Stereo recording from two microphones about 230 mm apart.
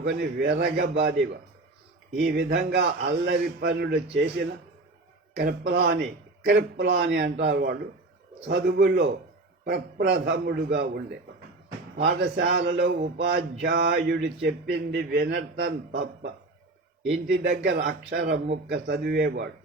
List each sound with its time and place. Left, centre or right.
0.0 s a man's voice: right